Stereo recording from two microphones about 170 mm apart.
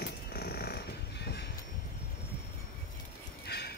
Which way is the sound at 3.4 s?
70° left (ahead or behind).